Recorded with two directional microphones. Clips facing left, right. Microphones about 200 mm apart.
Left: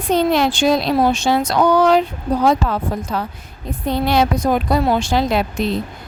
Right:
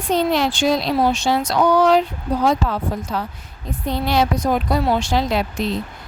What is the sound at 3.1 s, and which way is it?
Speech, 55° left (ahead or behind).